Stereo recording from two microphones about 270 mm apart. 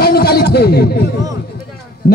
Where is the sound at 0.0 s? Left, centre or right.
Left.